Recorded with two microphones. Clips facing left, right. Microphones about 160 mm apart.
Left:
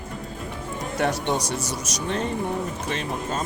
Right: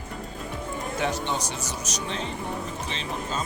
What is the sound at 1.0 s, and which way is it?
Speech, 70° left (ahead or behind).